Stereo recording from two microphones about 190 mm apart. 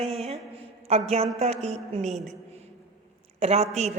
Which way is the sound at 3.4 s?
35° right (ahead or behind).